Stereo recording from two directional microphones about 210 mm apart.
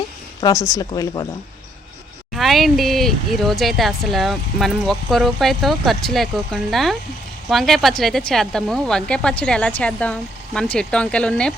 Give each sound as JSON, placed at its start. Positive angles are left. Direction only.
{"t": 0.7, "sound": "speech", "side_deg": 15}
{"t": 2.3, "sound": "speech", "side_deg": 0}